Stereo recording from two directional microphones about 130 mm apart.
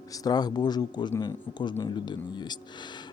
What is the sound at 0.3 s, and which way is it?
Speech, 30° left (ahead or behind).